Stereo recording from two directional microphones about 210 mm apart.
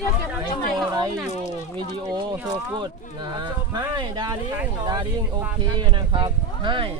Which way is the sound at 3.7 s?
20° right (ahead or behind).